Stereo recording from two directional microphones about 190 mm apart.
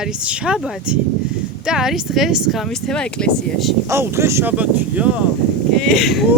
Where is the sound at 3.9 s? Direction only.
15° right (ahead or behind).